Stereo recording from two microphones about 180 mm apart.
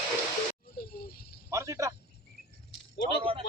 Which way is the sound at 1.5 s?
15° right (ahead or behind).